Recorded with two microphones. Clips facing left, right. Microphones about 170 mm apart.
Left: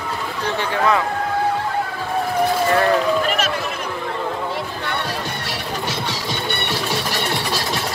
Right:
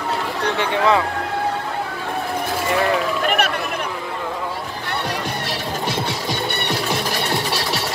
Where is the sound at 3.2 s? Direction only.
60° right (ahead or behind).